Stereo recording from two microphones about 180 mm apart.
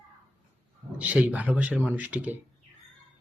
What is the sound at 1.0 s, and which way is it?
Speech, 5° right (ahead or behind).